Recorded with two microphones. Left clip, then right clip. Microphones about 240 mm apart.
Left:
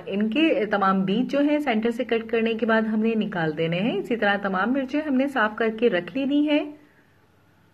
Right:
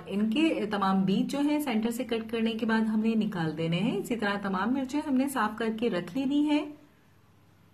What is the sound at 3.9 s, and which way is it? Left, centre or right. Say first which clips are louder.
A woman's voice: left 8 dB; centre.